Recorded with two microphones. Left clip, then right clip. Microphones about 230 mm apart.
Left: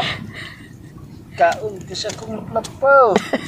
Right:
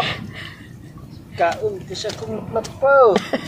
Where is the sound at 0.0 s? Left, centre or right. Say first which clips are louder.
Even; centre.